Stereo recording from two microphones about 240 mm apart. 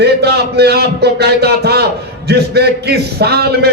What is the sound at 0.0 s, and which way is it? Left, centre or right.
A man's voice, right.